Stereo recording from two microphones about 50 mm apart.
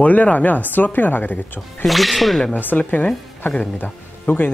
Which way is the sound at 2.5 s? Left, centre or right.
Left.